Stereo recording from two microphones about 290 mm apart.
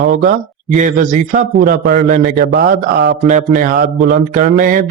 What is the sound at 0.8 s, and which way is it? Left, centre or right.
Speech, right.